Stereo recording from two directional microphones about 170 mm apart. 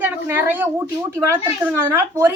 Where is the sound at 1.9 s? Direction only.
15° right (ahead or behind).